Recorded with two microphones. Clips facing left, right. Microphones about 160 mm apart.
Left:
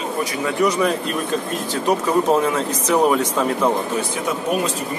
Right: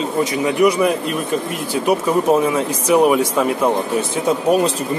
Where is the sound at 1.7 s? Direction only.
10° right (ahead or behind).